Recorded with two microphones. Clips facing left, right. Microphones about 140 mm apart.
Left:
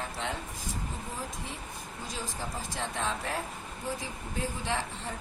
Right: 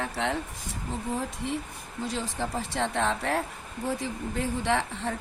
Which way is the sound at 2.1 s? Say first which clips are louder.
Right 7 dB; 70° right (ahead or behind).